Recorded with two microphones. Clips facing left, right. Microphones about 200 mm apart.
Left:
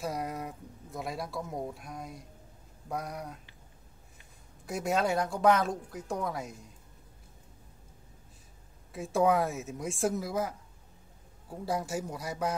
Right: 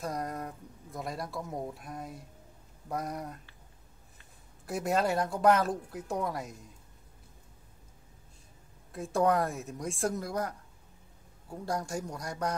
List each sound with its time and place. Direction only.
0.0 s a woman's voice: 5° left (ahead or behind)
4.6 s a woman's voice: centre (ahead or behind)
8.9 s a woman's voice: centre (ahead or behind)
11.6 s a woman's voice: 5° left (ahead or behind)